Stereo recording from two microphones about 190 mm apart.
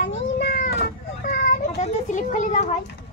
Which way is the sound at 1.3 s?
40° left (ahead or behind).